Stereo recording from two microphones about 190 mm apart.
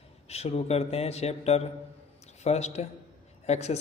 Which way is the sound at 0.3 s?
35° left (ahead or behind).